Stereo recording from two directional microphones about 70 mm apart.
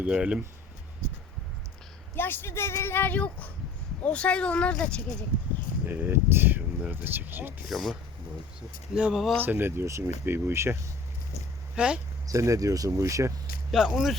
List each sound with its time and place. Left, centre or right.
0.0 s speech: centre
2.1 s speech: left; by 5.1 s centre
5.8 s speech: right
7.7 s speech: centre
8.9 s speech: centre
9.4 s speech: right
11.7 s speech: centre
12.2 s speech: right
13.7 s speech: centre